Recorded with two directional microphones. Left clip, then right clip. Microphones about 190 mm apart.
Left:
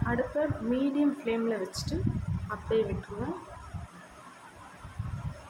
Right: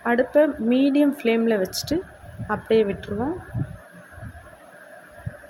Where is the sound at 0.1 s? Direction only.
45° right (ahead or behind).